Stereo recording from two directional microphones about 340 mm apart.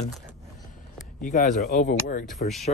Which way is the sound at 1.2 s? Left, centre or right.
Left.